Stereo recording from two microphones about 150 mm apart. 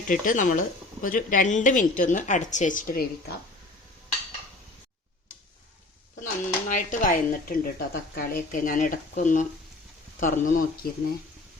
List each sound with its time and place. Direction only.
0.1 s speech: 65° left (ahead or behind)
6.2 s speech: 55° left (ahead or behind)
10.8 s speech: 90° left